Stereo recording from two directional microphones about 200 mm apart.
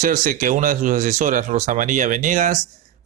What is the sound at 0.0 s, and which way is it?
Speech, 45° right (ahead or behind).